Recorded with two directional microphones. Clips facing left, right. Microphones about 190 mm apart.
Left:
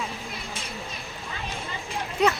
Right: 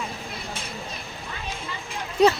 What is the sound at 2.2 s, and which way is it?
Speech, 35° right (ahead or behind).